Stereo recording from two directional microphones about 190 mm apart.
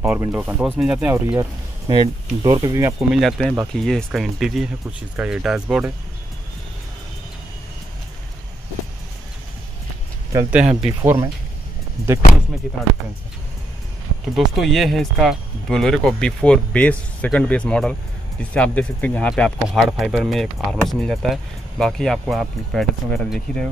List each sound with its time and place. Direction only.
0.0 s speech: 10° right (ahead or behind)
3.1 s speech: centre (ahead or behind)
10.3 s speech: 5° right (ahead or behind)
11.0 s speech: 15° right (ahead or behind)
14.3 s speech: centre (ahead or behind)